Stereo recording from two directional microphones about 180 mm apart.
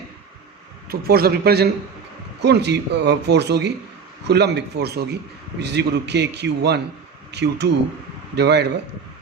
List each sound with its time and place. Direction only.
0.9 s a man's voice: 60° right (ahead or behind)